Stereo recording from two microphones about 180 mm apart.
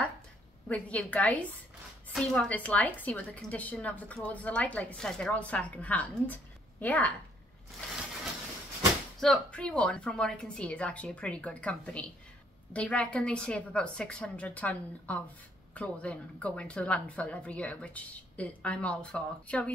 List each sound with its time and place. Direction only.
0.7 s a woman's voice: 5° left (ahead or behind)
9.2 s a woman's voice: 5° left (ahead or behind)